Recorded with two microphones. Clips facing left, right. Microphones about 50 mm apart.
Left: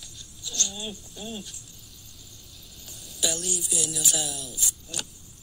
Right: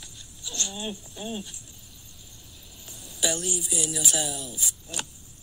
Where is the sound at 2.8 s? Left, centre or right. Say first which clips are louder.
Right 2 dB; centre.